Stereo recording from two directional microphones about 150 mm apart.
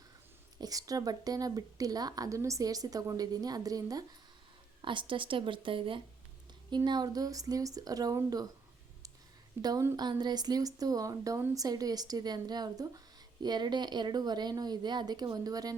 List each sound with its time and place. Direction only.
0.6 s a woman's voice: 25° right (ahead or behind)
9.6 s speech: 25° right (ahead or behind)